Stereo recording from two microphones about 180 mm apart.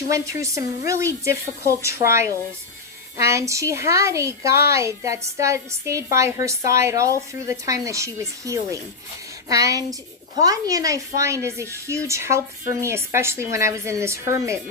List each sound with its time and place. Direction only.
0.1 s a woman's voice: 15° right (ahead or behind)